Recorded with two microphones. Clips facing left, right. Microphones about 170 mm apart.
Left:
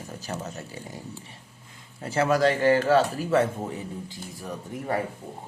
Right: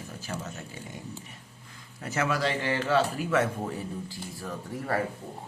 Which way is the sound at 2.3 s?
45° left (ahead or behind).